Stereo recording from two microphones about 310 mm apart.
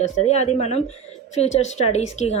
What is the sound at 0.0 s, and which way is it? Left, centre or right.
A woman's voice, left.